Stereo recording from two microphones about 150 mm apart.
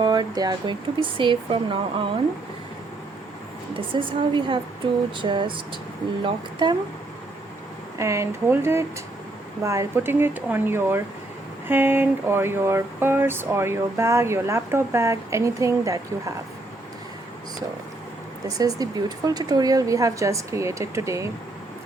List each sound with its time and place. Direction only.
0.0 s speech: 25° right (ahead or behind)
3.8 s a woman's voice: 35° right (ahead or behind)
7.9 s a woman's voice: 20° right (ahead or behind)
18.4 s a woman's voice: 25° right (ahead or behind)